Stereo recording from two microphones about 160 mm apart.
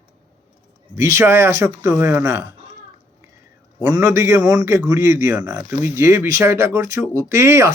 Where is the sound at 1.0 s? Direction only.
15° right (ahead or behind).